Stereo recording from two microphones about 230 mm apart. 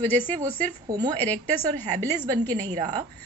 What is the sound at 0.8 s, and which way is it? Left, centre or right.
Speech, centre.